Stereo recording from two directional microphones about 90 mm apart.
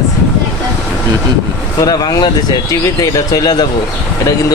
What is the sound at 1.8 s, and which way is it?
Speech, 45° left (ahead or behind).